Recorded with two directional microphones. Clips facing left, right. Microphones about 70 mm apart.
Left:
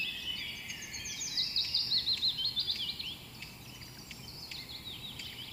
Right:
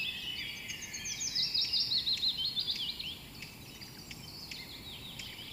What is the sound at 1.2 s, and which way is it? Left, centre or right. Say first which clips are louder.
Bird vocalization: even; centre.